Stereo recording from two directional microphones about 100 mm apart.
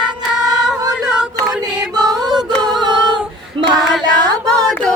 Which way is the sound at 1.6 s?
10° right (ahead or behind).